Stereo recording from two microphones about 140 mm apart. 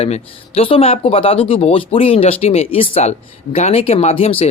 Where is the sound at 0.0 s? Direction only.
45° left (ahead or behind).